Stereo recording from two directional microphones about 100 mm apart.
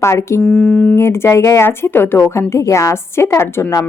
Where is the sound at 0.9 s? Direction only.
25° left (ahead or behind).